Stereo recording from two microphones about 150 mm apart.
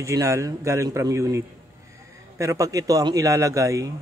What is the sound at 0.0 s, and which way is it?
A man's voice, 20° right (ahead or behind).